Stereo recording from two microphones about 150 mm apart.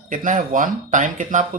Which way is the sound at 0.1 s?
60° right (ahead or behind).